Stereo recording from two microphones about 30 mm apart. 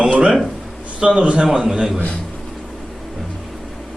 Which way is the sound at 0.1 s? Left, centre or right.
Right.